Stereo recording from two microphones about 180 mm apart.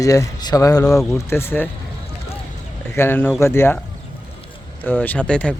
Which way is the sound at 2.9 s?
10° left (ahead or behind).